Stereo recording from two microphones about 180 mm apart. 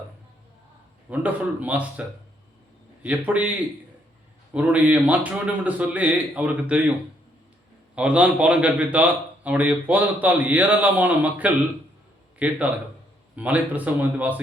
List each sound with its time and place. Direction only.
1.1 s a man's voice: 10° right (ahead or behind)
4.5 s a man's voice: 10° right (ahead or behind)
7.9 s a man's voice: 5° right (ahead or behind)